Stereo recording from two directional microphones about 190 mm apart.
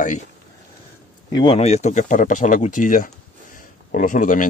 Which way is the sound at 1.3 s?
30° left (ahead or behind).